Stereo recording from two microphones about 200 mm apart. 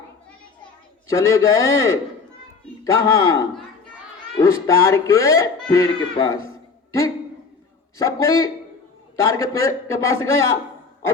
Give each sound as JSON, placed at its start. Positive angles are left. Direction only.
{"t": 1.1, "sound": "speech", "side_deg": 15}
{"t": 7.9, "sound": "speech", "side_deg": 15}